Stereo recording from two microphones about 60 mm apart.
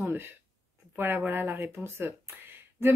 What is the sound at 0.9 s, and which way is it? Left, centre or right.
Speech, right.